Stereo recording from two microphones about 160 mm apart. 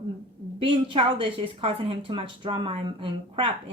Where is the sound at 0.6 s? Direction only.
35° right (ahead or behind).